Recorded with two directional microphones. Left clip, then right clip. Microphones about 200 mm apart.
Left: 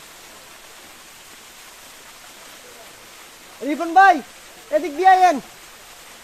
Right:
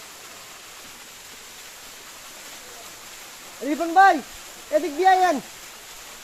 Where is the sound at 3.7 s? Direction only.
20° left (ahead or behind).